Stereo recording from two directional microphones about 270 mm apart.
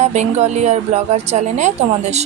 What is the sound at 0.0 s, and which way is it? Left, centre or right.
Speech, right.